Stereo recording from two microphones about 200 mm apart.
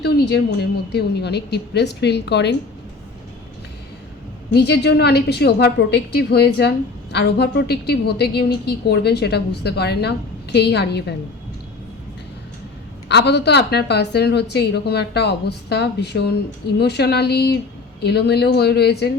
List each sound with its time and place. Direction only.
0.0 s a woman's voice: 55° left (ahead or behind)
4.5 s a woman's voice: 55° left (ahead or behind)
13.1 s a woman's voice: 60° left (ahead or behind)